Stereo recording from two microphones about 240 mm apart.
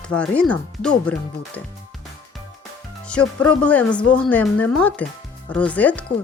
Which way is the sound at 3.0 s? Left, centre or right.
Centre.